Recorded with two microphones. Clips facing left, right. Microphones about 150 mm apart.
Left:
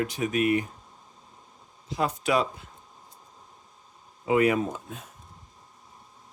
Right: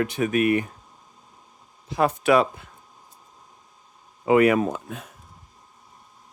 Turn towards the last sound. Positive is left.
turn(degrees=-65)  # may be behind; listen again after turning